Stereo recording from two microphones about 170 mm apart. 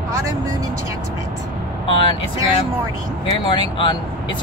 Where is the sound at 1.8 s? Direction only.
30° left (ahead or behind).